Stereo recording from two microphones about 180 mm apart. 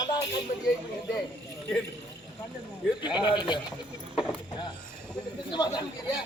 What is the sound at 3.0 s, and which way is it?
Speech, 25° left (ahead or behind).